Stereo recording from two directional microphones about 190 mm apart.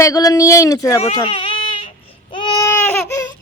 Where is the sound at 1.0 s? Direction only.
25° left (ahead or behind).